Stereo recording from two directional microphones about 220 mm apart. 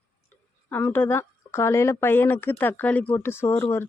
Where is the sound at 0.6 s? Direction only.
10° left (ahead or behind).